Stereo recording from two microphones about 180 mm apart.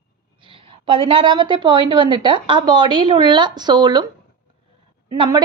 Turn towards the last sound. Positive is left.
turn(degrees=-20)  # may be behind; listen again after turning